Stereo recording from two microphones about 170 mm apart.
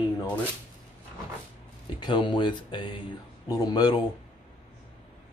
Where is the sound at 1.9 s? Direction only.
25° left (ahead or behind).